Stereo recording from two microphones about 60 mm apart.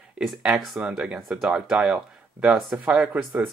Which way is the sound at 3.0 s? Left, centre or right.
Right.